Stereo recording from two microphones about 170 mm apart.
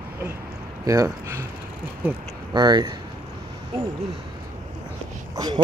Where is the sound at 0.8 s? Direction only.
20° right (ahead or behind).